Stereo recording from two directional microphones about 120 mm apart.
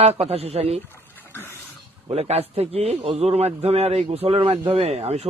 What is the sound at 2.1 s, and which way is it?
A man's voice, 60° right (ahead or behind).